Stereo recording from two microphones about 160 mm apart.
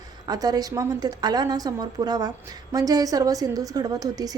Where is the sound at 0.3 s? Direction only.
25° right (ahead or behind).